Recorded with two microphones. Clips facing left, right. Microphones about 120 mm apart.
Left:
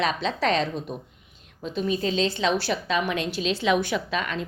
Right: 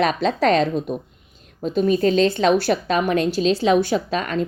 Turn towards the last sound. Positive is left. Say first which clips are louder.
# right 6 dB
turn(degrees=-40)  # may be behind; listen again after turning